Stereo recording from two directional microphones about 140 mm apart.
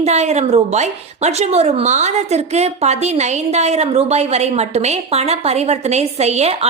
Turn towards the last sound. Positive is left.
turn(degrees=-50)  # may be behind; listen again after turning